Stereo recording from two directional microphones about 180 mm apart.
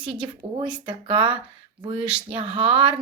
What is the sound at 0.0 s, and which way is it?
A woman's voice, 30° right (ahead or behind).